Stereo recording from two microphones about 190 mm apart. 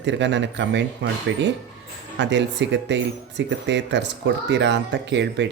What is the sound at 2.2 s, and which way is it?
Speech, 65° right (ahead or behind).